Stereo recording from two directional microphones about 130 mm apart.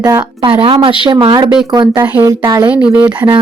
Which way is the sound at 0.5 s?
45° right (ahead or behind).